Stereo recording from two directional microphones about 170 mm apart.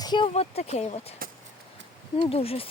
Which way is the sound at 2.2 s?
35° left (ahead or behind).